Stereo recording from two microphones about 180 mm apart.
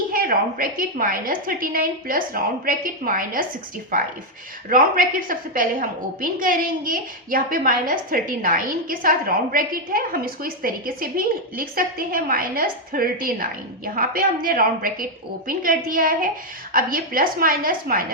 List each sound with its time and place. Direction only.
0.1 s a woman's voice: 55° right (ahead or behind)